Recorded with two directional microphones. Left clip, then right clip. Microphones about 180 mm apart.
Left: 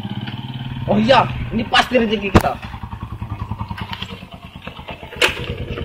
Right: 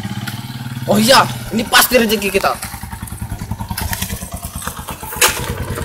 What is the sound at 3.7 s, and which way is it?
Motorcycle, 25° right (ahead or behind).